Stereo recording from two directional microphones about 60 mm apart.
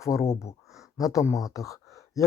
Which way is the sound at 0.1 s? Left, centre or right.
Left.